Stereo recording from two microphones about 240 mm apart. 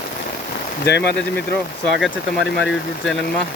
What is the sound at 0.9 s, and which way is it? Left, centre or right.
Speech, left.